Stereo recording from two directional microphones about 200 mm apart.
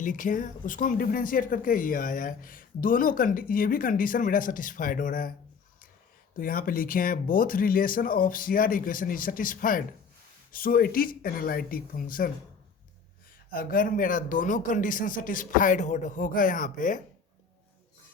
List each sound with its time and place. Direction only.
0.0 s speech: 40° left (ahead or behind)
6.3 s speech: 45° left (ahead or behind)
13.5 s speech: 45° left (ahead or behind)